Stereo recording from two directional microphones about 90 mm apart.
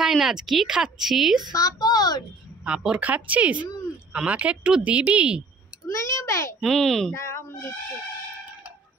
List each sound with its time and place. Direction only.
0.0 s speech: 5° right (ahead or behind)
1.5 s a woman's voice: 40° left (ahead or behind)
2.6 s speech: 10° right (ahead or behind)
5.9 s a child's voice: 35° left (ahead or behind)
6.6 s speech: 5° left (ahead or behind)
7.2 s speech: 30° left (ahead or behind)